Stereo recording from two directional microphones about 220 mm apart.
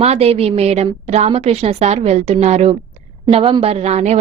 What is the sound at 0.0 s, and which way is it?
Speech, 30° right (ahead or behind).